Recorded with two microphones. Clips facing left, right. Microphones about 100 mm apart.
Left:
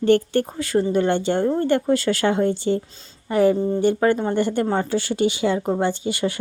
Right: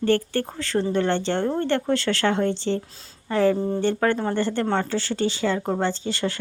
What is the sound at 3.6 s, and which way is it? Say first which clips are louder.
Speech: left 3 dB; centre (ahead or behind).